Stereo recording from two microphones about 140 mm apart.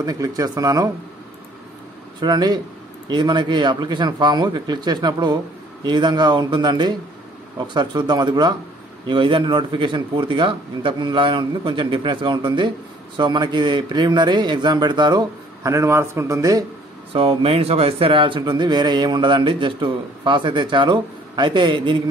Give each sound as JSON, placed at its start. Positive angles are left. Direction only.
{"t": 0.0, "sound": "speech", "side_deg": -25}
{"t": 2.1, "sound": "speech", "side_deg": -30}
{"t": 17.1, "sound": "speech", "side_deg": -40}